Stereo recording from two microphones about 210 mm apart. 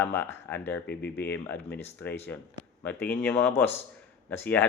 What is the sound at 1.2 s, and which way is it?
Speech, 10° left (ahead or behind).